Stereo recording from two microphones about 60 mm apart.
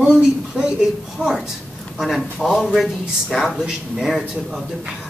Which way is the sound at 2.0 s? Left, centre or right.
Centre.